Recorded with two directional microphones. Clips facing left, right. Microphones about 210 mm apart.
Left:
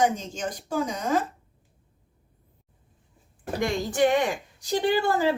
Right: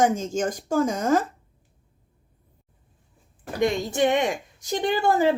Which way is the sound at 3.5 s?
20° right (ahead or behind).